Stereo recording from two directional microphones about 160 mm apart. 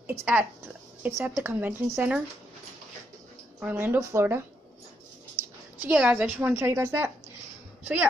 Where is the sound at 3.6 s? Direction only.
10° right (ahead or behind).